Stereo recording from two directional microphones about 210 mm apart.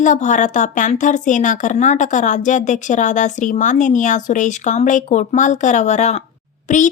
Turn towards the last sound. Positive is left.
turn(degrees=35)  # may be behind; listen again after turning